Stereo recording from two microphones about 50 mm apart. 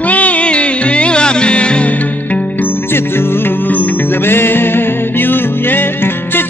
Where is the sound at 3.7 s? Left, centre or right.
Left.